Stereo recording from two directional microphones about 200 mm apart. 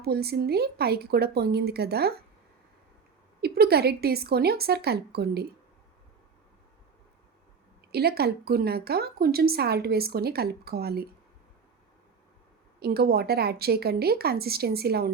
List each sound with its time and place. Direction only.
0.0 s a woman's voice: 50° right (ahead or behind)
3.4 s a woman's voice: 50° right (ahead or behind)
7.9 s a woman's voice: 50° right (ahead or behind)
12.8 s a woman's voice: 50° right (ahead or behind)